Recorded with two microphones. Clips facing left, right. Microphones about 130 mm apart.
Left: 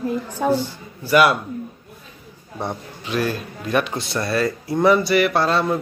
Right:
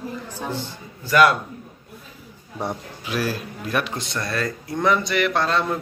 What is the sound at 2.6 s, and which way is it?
A man's voice, 10° right (ahead or behind).